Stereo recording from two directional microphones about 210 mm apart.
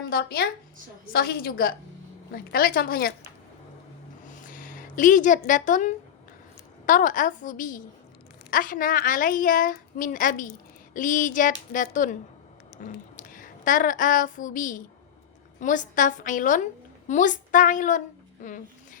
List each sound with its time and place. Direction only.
0.1 s a woman's voice: 45° left (ahead or behind)
4.4 s a woman's voice: 40° left (ahead or behind)
12.8 s a sound: 40° left (ahead or behind)
15.6 s a woman's voice: 35° left (ahead or behind)